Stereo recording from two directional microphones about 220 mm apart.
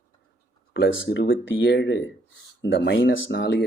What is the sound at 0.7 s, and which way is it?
Speech, 55° left (ahead or behind).